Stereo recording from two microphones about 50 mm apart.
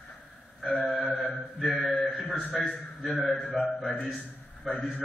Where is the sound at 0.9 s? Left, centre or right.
Centre.